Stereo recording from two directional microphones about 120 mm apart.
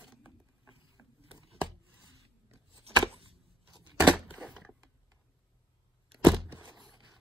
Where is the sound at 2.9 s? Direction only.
60° right (ahead or behind).